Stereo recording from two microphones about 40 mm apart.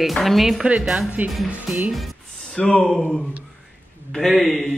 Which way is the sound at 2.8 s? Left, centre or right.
Centre.